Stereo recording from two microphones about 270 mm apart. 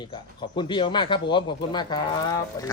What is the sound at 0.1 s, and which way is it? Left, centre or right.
A man's voice, centre.